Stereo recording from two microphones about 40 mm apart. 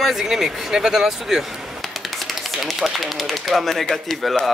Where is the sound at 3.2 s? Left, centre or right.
Centre.